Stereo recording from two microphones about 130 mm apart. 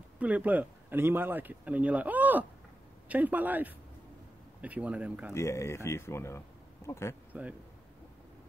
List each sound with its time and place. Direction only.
0.2 s speech: 10° right (ahead or behind)
5.3 s speech: 20° left (ahead or behind)